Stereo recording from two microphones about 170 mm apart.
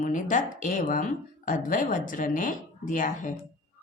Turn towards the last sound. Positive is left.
turn(degrees=50)  # may be behind; listen again after turning